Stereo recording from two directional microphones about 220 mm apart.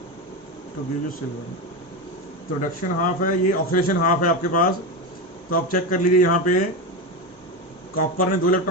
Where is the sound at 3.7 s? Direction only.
40° left (ahead or behind).